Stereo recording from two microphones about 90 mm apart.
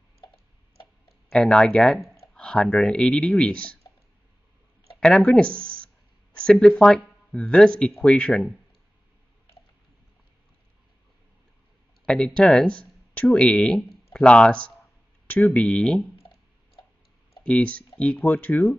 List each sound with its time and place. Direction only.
1.0 s speech: 5° left (ahead or behind)
5.0 s speech: 10° left (ahead or behind)
12.4 s speech: 10° left (ahead or behind)
17.4 s speech: 15° left (ahead or behind)